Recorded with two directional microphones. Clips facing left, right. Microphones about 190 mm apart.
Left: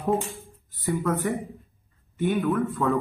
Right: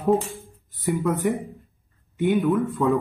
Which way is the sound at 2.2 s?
15° right (ahead or behind).